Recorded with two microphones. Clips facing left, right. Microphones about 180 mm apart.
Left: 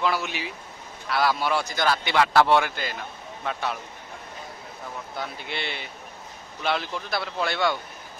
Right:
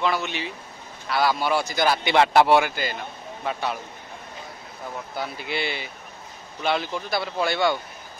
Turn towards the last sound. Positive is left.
turn(degrees=0)  # may be behind; listen again after turning